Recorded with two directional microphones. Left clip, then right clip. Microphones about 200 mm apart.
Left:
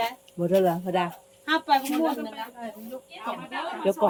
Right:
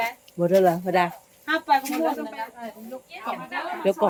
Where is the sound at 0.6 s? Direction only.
30° right (ahead or behind).